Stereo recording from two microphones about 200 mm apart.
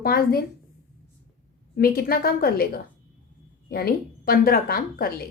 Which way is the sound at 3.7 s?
50° left (ahead or behind).